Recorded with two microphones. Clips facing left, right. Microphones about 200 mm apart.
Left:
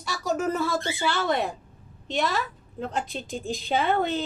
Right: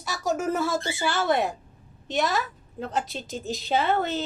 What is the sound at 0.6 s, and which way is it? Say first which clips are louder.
Speech: even; 45° right (ahead or behind).